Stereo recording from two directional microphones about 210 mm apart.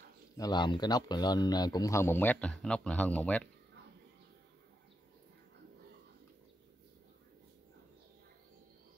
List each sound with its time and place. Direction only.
0.4 s speech: 20° left (ahead or behind)